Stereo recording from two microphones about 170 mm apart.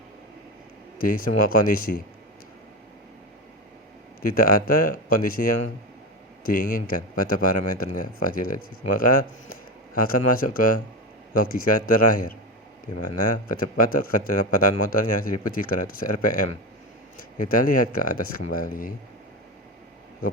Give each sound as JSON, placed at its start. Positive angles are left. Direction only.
{"t": 0.9, "sound": "speech", "side_deg": 55}
{"t": 4.2, "sound": "speech", "side_deg": 55}